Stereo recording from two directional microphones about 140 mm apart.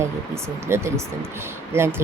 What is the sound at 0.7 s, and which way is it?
Speech, 20° right (ahead or behind).